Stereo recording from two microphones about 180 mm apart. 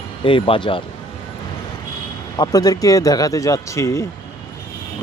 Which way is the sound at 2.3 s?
20° left (ahead or behind).